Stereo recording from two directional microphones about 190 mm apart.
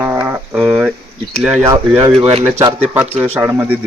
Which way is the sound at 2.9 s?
10° right (ahead or behind).